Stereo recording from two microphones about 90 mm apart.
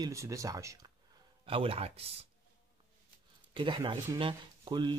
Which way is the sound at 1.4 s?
90° right.